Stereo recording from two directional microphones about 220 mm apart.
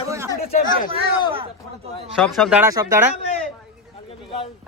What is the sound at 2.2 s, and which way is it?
Speech, centre (ahead or behind).